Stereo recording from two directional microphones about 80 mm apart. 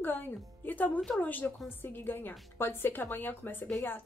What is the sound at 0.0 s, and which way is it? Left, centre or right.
Music, left.